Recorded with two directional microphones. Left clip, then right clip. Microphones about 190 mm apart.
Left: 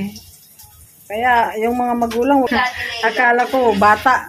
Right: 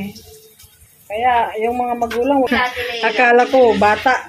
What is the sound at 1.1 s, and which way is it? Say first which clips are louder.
Speech: left 1 dB; 10° left (ahead or behind).